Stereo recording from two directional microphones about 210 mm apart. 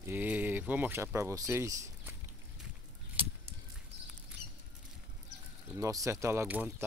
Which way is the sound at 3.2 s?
25° right (ahead or behind).